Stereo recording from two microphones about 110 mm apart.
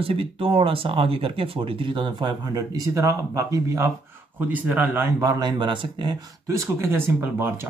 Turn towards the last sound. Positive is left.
turn(degrees=-20)  # may be behind; listen again after turning